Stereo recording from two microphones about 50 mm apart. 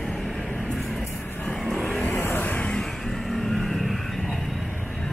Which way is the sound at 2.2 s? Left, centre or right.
Left.